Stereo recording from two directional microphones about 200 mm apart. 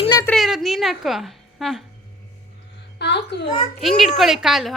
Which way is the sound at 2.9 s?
60° left (ahead or behind).